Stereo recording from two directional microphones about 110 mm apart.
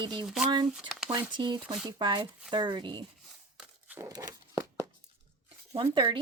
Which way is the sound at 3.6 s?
15° right (ahead or behind).